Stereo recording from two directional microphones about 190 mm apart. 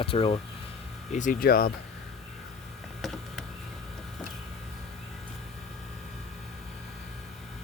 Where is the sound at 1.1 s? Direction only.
45° left (ahead or behind).